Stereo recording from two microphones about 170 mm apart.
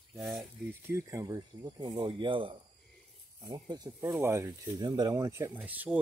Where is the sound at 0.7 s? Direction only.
15° right (ahead or behind).